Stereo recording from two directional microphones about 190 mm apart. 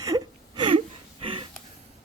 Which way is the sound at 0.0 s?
20° right (ahead or behind).